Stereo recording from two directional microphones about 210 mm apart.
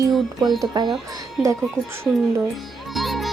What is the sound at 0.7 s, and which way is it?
Speech, 20° right (ahead or behind).